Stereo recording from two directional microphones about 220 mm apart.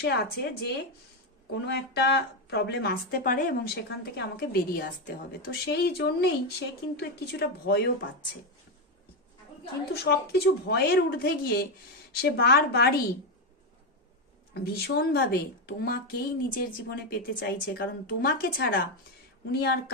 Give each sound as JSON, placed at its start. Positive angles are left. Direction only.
{"t": 0.0, "sound": "a woman's voice", "side_deg": 45}
{"t": 1.5, "sound": "a woman's voice", "side_deg": 50}
{"t": 9.9, "sound": "a woman's voice", "side_deg": 45}
{"t": 14.5, "sound": "a woman's voice", "side_deg": 45}